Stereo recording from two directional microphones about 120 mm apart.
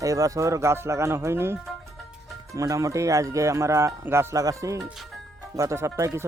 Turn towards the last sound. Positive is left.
turn(degrees=-25)  # may be behind; listen again after turning